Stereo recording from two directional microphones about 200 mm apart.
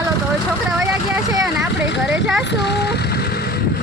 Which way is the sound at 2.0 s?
5° right (ahead or behind).